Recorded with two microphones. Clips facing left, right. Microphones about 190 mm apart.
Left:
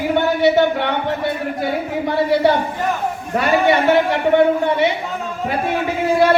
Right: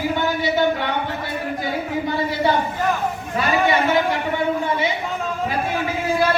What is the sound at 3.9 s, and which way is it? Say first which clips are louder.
Speech: left 6 dB; 65° left (ahead or behind).